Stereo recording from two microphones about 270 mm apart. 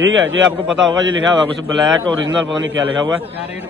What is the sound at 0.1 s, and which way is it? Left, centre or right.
Speech, right.